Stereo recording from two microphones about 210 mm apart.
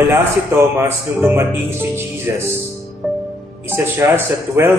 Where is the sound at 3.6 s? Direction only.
10° right (ahead or behind).